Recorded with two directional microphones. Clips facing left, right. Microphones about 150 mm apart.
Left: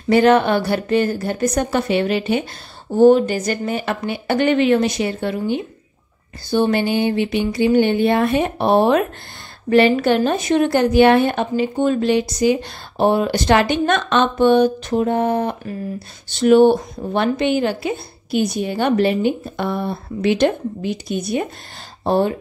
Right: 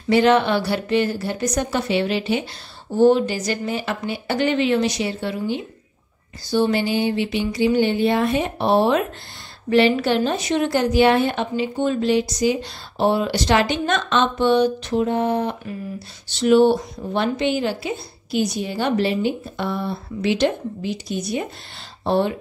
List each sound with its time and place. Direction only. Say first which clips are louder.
0.1 s a woman's voice: left 3 dB; 50° left (ahead or behind)
22.0 s speech: left 2 dB; 45° left (ahead or behind)